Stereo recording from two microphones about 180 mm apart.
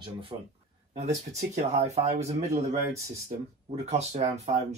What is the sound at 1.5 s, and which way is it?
Speech, 35° right (ahead or behind).